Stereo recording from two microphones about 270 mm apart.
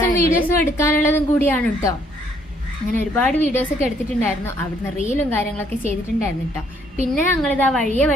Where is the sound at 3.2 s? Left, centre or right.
Centre.